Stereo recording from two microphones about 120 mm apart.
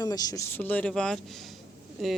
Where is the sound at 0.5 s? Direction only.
15° left (ahead or behind).